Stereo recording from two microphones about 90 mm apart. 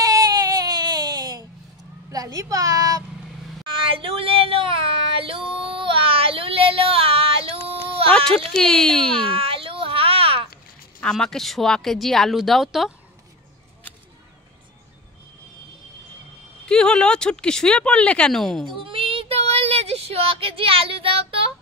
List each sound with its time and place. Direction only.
0.0 s baby cry: 40° right (ahead or behind)
2.0 s a child's voice: 40° right (ahead or behind)
3.7 s female singing: 80° right
8.5 s speech: 10° left (ahead or behind)
9.3 s a sound: 85° right
11.0 s speech: 10° left (ahead or behind)
16.6 s speech: 10° left (ahead or behind)
18.8 s child singing: 85° right
19.9 s a sound: 90° right